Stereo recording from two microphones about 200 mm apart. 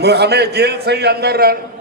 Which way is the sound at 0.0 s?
55° right (ahead or behind).